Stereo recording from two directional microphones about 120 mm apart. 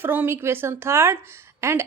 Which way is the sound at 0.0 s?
15° right (ahead or behind).